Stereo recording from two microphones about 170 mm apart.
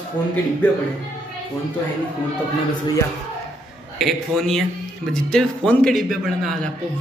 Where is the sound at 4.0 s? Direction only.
Centre (ahead or behind).